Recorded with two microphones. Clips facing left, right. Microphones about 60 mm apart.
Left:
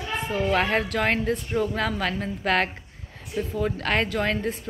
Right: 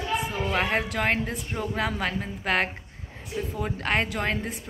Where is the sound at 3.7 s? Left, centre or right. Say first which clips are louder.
Left 2 dB; centre.